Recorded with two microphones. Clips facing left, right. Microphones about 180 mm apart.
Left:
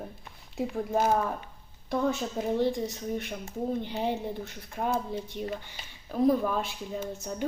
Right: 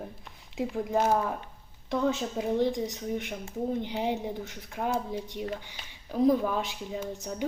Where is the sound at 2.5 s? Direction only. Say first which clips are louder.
Even; 15° right (ahead or behind).